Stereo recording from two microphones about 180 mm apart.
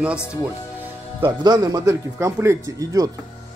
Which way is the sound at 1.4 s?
20° right (ahead or behind).